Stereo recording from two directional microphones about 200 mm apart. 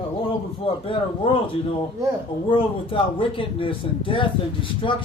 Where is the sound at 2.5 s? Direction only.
25° left (ahead or behind).